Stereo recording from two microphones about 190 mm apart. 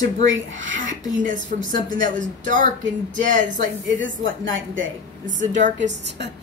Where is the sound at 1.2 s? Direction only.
45° right (ahead or behind).